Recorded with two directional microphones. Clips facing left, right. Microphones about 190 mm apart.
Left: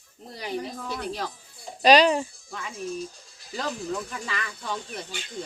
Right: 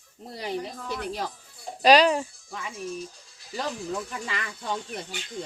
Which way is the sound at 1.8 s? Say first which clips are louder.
Even; 5° right (ahead or behind).